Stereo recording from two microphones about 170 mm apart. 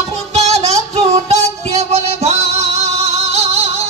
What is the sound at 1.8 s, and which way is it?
Music, 40° right (ahead or behind).